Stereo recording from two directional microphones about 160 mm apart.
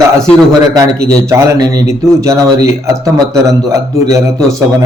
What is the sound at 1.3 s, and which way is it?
A man's voice, 20° right (ahead or behind).